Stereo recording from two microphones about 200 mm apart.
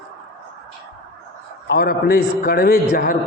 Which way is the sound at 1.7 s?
50° left (ahead or behind).